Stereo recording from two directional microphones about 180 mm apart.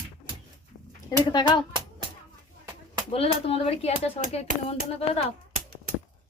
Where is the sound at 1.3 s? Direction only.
25° left (ahead or behind).